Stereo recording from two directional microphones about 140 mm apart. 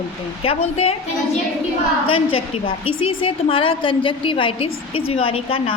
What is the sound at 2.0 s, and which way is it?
A woman's voice, 40° left (ahead or behind).